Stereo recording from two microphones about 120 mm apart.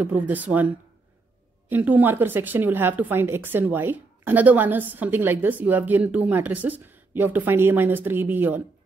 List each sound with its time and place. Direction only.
0.0 s speech: 15° right (ahead or behind)
1.7 s speech: 15° right (ahead or behind)